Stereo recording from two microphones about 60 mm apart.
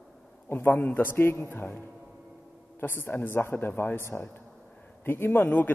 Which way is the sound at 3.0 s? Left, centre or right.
Left.